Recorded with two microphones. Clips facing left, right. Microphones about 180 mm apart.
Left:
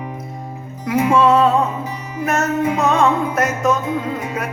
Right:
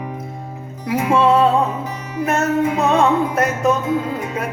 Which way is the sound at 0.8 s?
30° right (ahead or behind).